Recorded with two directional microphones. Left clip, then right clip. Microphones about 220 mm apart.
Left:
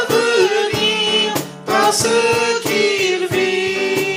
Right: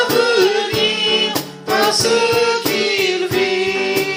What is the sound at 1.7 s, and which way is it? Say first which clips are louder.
Music: even; 50° left (ahead or behind).